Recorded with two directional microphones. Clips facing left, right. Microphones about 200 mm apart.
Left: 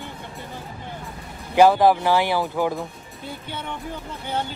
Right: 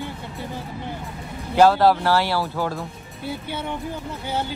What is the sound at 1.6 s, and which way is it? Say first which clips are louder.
Speech: even; 15° left (ahead or behind).